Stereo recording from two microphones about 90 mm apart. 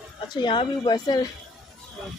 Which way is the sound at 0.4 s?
60° left (ahead or behind).